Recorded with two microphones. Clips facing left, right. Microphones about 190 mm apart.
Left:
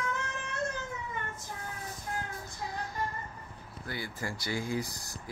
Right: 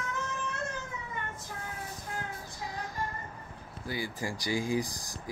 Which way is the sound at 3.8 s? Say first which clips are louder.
Right 3 dB; 15° right (ahead or behind).